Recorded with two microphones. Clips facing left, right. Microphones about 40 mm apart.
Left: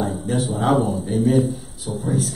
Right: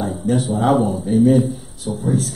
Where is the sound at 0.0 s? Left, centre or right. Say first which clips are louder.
Right 3 dB; centre.